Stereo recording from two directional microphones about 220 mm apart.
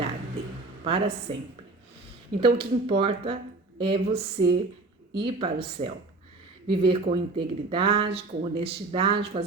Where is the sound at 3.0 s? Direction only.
25° right (ahead or behind).